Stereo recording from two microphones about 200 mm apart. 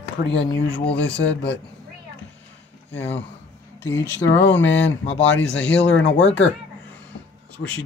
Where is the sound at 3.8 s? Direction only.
10° left (ahead or behind).